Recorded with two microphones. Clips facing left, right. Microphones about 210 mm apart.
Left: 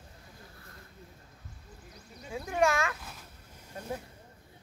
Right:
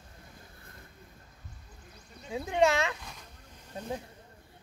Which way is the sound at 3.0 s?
5° left (ahead or behind).